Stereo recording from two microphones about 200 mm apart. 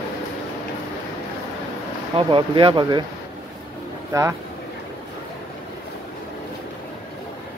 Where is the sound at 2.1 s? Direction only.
25° right (ahead or behind).